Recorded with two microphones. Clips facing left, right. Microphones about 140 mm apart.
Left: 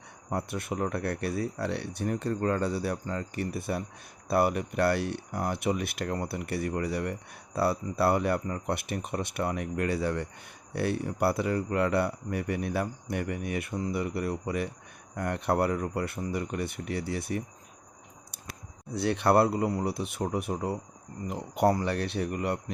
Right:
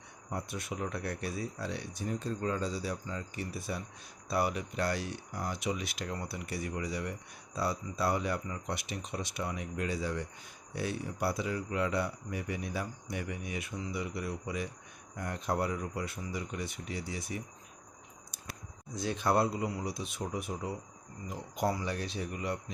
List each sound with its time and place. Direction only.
0.3 s speech: 60° left (ahead or behind)
18.9 s speech: 65° left (ahead or behind)